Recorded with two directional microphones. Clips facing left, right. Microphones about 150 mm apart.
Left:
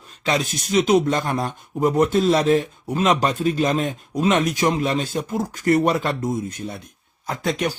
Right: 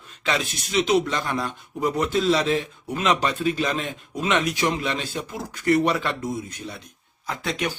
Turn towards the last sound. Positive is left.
turn(degrees=45)  # may be behind; listen again after turning